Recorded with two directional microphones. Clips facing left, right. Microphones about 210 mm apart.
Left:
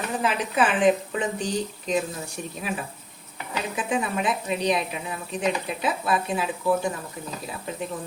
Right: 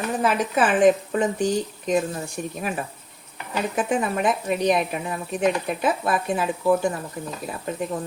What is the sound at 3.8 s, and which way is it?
Speech, 50° right (ahead or behind).